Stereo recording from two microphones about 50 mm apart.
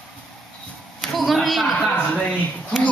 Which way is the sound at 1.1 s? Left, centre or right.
Centre.